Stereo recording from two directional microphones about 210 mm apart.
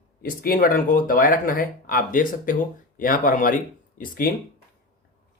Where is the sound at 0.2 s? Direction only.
45° left (ahead or behind).